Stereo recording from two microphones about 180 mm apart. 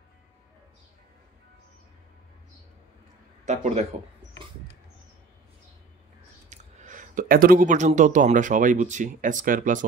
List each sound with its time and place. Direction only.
3.4 s a man's voice: 40° right (ahead or behind)
6.5 s speech: 45° right (ahead or behind)